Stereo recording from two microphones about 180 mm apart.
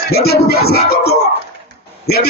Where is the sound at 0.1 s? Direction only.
60° left (ahead or behind).